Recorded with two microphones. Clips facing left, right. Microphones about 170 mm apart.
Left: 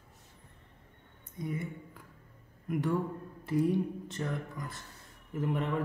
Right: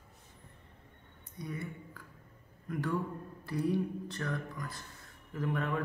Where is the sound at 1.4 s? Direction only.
20° left (ahead or behind).